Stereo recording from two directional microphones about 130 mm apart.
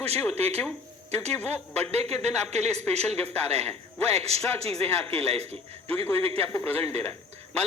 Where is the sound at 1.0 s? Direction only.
55° right (ahead or behind).